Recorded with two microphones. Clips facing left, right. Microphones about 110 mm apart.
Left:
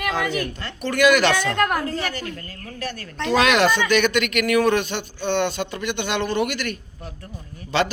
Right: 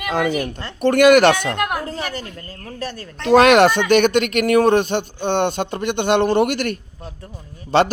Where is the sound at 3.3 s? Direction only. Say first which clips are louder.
Right 7 dB; 55° right (ahead or behind).